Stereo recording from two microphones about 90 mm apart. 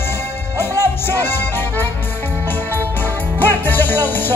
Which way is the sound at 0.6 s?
25° left (ahead or behind).